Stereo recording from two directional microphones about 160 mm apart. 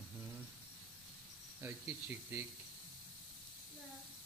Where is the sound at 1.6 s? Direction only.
15° right (ahead or behind).